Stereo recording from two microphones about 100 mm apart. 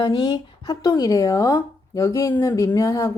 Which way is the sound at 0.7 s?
35° left (ahead or behind).